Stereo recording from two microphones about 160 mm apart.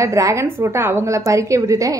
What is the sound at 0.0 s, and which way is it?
A woman's voice, 20° right (ahead or behind).